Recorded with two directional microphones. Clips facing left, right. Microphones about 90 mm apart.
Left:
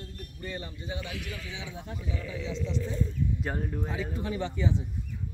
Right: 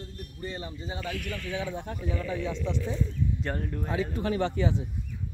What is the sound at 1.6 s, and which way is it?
Speech, 55° right (ahead or behind).